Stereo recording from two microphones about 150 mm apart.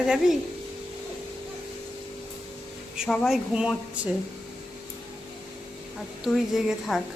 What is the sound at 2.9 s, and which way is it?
Speech, centre (ahead or behind).